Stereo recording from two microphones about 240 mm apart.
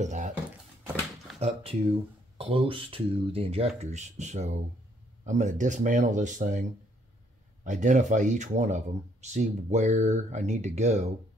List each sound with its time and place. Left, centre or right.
0.0 s speech: right
1.4 s speech: right
7.6 s speech: right